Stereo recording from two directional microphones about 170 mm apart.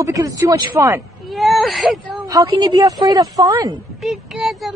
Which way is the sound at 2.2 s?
20° right (ahead or behind).